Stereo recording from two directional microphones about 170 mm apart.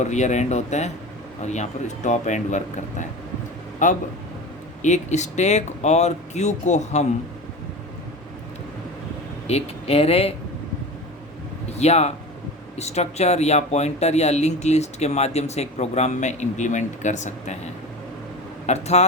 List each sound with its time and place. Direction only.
0.0 s speech: 45° left (ahead or behind)
9.5 s speech: 35° left (ahead or behind)
11.8 s speech: 40° left (ahead or behind)
18.6 s speech: 40° left (ahead or behind)